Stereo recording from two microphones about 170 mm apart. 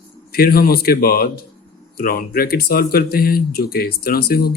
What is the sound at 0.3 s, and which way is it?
Speech, 60° left (ahead or behind).